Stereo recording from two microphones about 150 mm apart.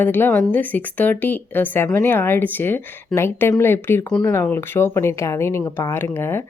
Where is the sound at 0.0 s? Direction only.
15° left (ahead or behind).